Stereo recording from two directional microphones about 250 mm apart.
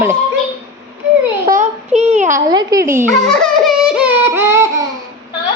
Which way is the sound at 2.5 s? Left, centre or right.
Centre.